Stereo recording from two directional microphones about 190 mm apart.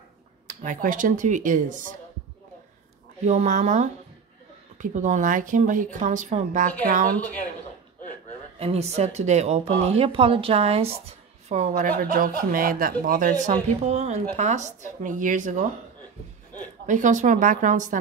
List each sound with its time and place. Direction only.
0.5 s speech: 40° right (ahead or behind)
3.3 s a woman's voice: 40° right (ahead or behind)
8.5 s a woman's voice: 35° right (ahead or behind)
16.8 s speech: 40° right (ahead or behind)